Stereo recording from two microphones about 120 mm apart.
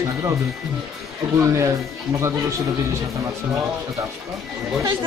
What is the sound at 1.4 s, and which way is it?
Speech, 25° right (ahead or behind).